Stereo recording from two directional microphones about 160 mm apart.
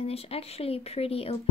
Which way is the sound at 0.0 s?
40° left (ahead or behind).